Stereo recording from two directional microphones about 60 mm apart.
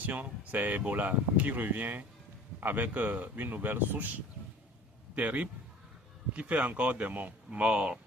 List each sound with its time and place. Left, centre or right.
0.0 s speech: right
5.1 s speech: right
7.6 s speech: centre